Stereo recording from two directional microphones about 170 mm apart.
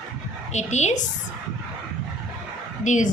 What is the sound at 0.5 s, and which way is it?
Speech, 45° left (ahead or behind).